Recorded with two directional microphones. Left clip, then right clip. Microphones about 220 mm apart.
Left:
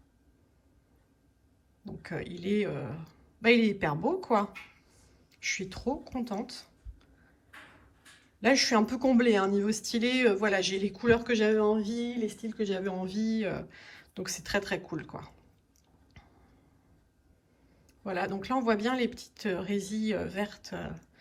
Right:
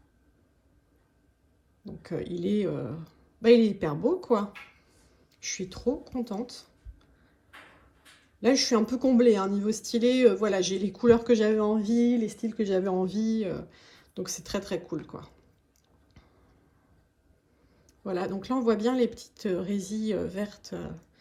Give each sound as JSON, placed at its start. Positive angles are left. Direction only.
{"t": 1.8, "sound": "speech", "side_deg": -5}
{"t": 8.4, "sound": "speech", "side_deg": -5}
{"t": 11.8, "sound": "speech", "side_deg": -25}
{"t": 13.1, "sound": "speech", "side_deg": -10}
{"t": 17.8, "sound": "speech", "side_deg": -10}